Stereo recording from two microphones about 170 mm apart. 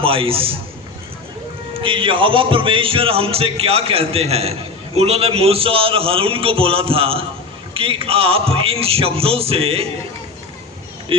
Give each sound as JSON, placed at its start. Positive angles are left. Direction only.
{"t": 0.0, "sound": "speech", "side_deg": -35}
{"t": 1.7, "sound": "speech", "side_deg": -30}